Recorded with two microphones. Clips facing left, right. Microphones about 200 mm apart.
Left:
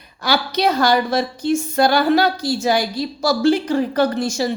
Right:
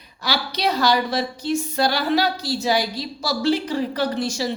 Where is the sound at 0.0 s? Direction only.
50° left (ahead or behind).